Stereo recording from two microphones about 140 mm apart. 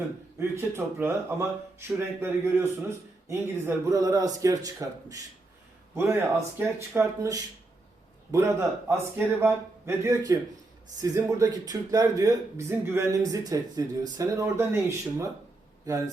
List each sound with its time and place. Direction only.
0.3 s a man's voice: 20° right (ahead or behind)